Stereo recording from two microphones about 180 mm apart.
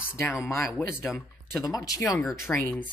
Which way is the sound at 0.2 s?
15° left (ahead or behind).